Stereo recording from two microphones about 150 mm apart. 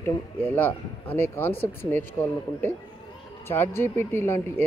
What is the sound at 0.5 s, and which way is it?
Speech, 15° left (ahead or behind).